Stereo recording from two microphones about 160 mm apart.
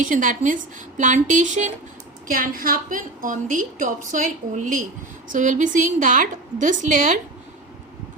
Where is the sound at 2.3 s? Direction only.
65° right (ahead or behind).